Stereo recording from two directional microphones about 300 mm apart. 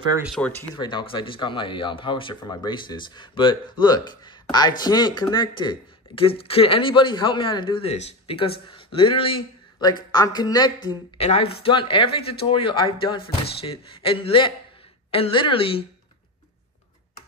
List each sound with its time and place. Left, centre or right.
0.2 s a woman's voice: centre